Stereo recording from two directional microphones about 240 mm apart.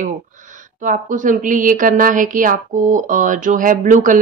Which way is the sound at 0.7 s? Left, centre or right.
Right.